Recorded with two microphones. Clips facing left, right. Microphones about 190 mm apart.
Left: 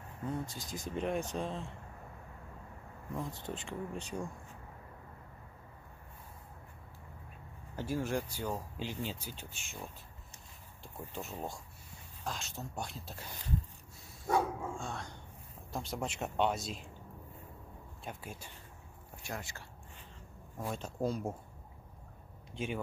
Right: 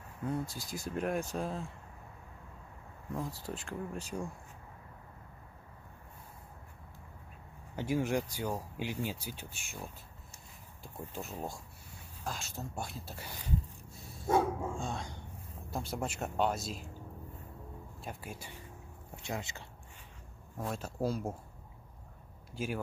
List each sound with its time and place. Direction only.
0.5 s speech: 10° right (ahead or behind)
3.2 s speech: 5° right (ahead or behind)
7.7 s speech: 15° right (ahead or behind)
14.2 s speech: 20° right (ahead or behind); by 16.8 s 5° right (ahead or behind)
18.0 s speech: 5° right (ahead or behind)
19.2 s speech: 20° right (ahead or behind)
20.5 s speech: 5° right (ahead or behind)
22.5 s speech: 5° right (ahead or behind)